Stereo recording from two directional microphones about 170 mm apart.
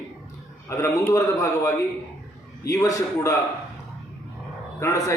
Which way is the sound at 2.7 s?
20° left (ahead or behind).